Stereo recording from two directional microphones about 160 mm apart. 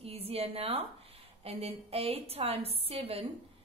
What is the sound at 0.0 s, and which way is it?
A woman's voice, 40° right (ahead or behind).